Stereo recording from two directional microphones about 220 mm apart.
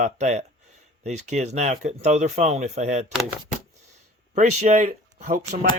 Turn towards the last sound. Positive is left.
turn(degrees=-35)  # may be behind; listen again after turning